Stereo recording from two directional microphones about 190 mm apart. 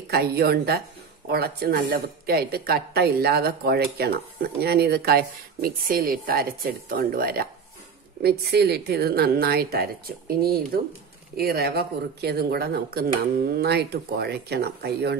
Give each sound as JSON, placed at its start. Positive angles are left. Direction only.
{"t": 0.1, "sound": "a woman's voice", "side_deg": -55}